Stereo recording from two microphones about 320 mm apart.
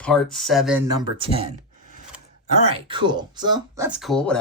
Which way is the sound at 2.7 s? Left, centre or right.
Centre.